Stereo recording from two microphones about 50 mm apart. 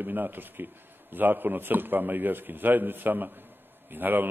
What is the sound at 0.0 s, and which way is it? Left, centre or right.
A man's voice, right.